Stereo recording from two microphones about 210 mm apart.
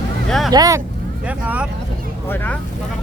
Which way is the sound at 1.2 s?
5° right (ahead or behind).